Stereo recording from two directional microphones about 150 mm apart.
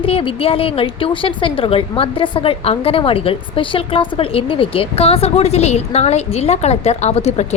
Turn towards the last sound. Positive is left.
turn(degrees=45)  # may be behind; listen again after turning